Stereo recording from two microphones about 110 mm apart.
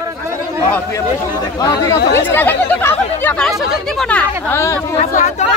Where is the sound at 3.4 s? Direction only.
Centre (ahead or behind).